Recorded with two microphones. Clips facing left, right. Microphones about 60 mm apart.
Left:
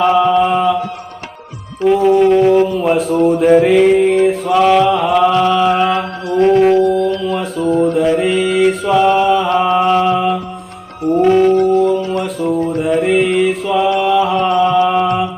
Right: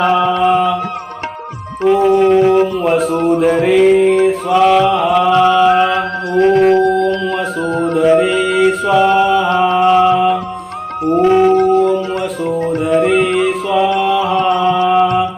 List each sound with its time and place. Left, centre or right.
0.0 s mantra: centre
1.8 s music: centre
6.7 s a sound: right
7.6 s music: right
7.9 s mantra: centre
11.0 s music: right
11.3 s mantra: centre
11.5 s music: right
12.2 s music: centre
12.5 s music: right
12.8 s mantra: centre